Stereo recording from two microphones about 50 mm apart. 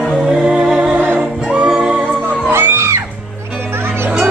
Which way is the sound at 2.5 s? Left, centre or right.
Right.